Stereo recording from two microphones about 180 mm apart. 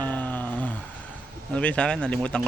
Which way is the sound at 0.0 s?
10° left (ahead or behind).